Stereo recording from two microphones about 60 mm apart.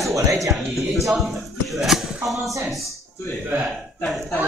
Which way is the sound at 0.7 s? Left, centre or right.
Centre.